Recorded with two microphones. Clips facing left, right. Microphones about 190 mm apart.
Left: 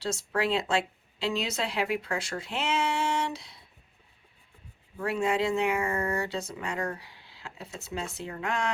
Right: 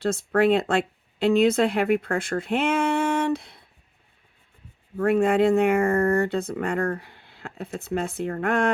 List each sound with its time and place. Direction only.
0.0 s speech: 55° right (ahead or behind)
4.9 s speech: 55° right (ahead or behind)